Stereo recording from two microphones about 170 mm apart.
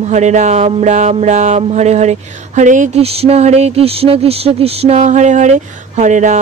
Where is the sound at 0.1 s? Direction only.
45° right (ahead or behind).